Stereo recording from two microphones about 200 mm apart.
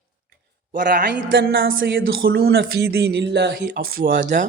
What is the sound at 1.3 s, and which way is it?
Speech, 65° right (ahead or behind).